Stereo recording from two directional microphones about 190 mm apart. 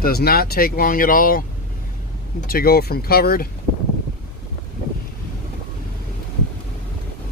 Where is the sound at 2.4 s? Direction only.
50° left (ahead or behind).